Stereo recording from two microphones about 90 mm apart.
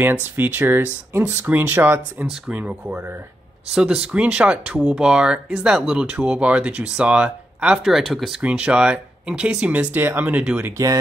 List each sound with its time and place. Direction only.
0.0 s speech: 20° right (ahead or behind); by 8.4 s centre (ahead or behind)
8.4 s speech: 15° right (ahead or behind)